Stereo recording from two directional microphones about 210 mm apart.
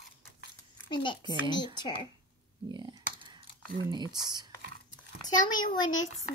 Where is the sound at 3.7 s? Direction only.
20° right (ahead or behind).